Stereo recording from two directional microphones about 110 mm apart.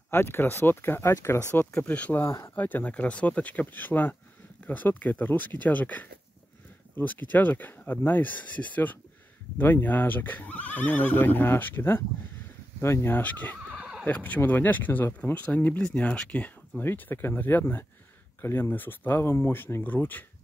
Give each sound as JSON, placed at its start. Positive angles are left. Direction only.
{"t": 0.1, "sound": "speech", "side_deg": 20}
{"t": 2.2, "sound": "speech", "side_deg": 25}
{"t": 2.5, "sound": "speech", "side_deg": 15}